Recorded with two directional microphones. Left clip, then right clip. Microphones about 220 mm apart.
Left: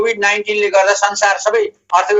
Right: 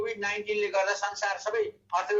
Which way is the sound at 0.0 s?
50° left (ahead or behind).